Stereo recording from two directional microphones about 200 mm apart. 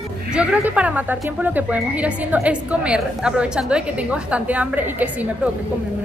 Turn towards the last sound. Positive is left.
turn(degrees=-5)  # may be behind; listen again after turning